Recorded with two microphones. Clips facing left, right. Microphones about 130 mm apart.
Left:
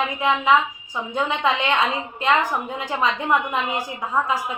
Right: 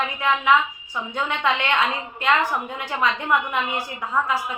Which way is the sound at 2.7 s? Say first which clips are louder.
Left 1 dB; 20° left (ahead or behind).